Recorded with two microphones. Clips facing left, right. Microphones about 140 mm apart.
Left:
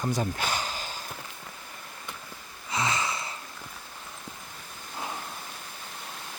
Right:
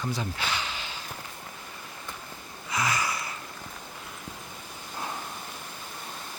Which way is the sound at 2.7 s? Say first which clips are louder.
Even; 25° left (ahead or behind).